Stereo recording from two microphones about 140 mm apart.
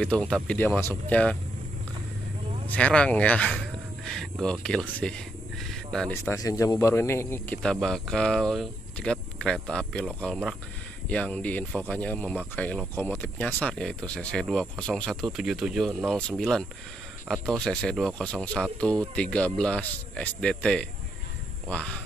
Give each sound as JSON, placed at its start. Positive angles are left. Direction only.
{"t": 0.0, "sound": "speech", "side_deg": 5}
{"t": 2.7, "sound": "speech", "side_deg": 10}
{"t": 6.3, "sound": "speech", "side_deg": 25}
{"t": 7.6, "sound": "speech", "side_deg": 5}